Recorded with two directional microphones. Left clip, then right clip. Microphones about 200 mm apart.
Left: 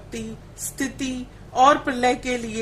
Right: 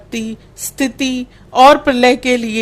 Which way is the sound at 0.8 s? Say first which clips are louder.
Right 11 dB; 35° right (ahead or behind).